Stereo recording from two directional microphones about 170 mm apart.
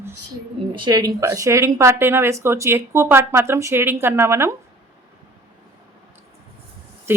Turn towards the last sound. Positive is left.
turn(degrees=-15)  # may be behind; listen again after turning